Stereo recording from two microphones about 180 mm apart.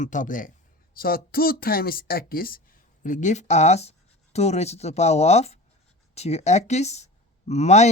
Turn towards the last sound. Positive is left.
turn(degrees=40)  # may be behind; listen again after turning